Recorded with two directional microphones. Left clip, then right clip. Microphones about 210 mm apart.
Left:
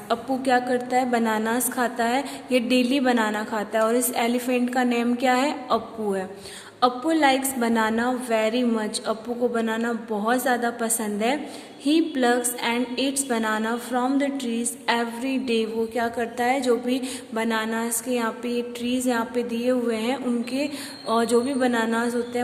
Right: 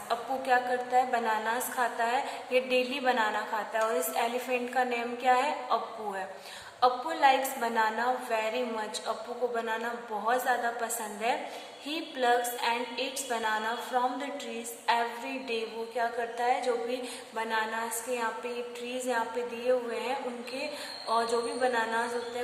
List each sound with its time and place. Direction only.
0.1 s a woman's voice: 40° left (ahead or behind)